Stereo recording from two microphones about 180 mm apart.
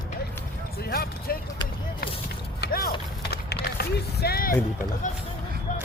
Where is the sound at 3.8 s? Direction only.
60° left (ahead or behind).